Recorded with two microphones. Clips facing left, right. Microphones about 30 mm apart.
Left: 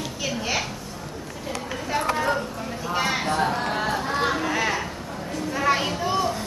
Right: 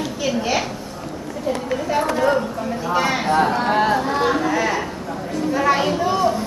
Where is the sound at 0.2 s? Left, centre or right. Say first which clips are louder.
Right 5 dB; centre.